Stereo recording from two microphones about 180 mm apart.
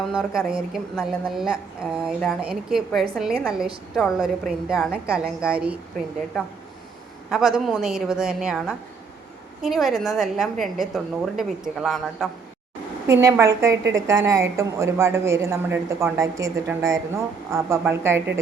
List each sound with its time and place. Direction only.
0.0 s a woman's voice: centre (ahead or behind)
7.3 s a woman's voice: centre (ahead or behind)
13.1 s a woman's voice: 15° right (ahead or behind)